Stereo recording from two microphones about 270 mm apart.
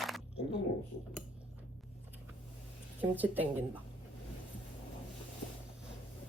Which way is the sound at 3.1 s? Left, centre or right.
Centre.